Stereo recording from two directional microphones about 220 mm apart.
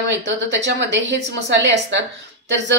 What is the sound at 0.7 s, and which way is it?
A woman's voice, 50° right (ahead or behind).